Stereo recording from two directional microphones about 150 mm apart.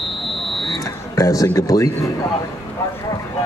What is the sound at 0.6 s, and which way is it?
Smoke detector, 25° left (ahead or behind).